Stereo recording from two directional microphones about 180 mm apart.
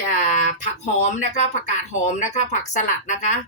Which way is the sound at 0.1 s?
45° left (ahead or behind).